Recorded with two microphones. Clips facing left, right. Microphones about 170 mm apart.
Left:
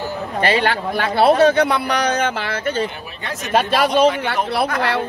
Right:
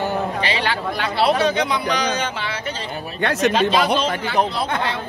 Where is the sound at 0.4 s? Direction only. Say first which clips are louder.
Left 5 dB; 50° left (ahead or behind).